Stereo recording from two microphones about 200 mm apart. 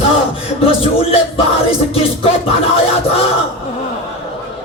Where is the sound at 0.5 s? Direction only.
30° left (ahead or behind).